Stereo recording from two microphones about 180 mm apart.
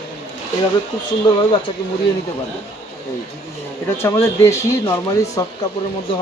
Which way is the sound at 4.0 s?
15° left (ahead or behind).